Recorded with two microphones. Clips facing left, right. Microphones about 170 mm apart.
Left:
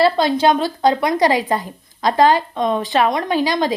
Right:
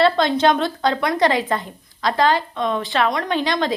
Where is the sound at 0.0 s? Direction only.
10° left (ahead or behind).